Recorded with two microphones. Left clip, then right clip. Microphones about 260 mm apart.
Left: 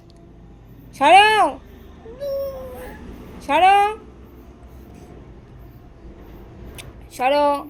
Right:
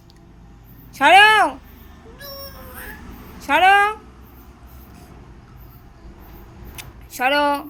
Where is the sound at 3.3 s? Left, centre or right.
Right.